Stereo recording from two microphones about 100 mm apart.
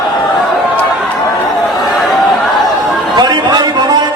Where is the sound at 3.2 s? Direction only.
45° right (ahead or behind).